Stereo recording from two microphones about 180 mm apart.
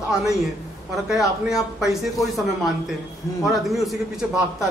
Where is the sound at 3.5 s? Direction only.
Centre (ahead or behind).